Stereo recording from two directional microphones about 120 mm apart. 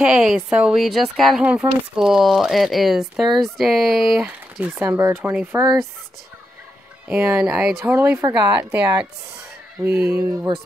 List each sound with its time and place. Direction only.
0.0 s speech: 5° right (ahead or behind)
1.4 s speech: 10° right (ahead or behind)
7.1 s speech: 15° right (ahead or behind)
9.8 s speech: 20° right (ahead or behind)